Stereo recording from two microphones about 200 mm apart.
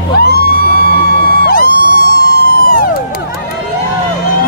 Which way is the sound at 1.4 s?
45° left (ahead or behind).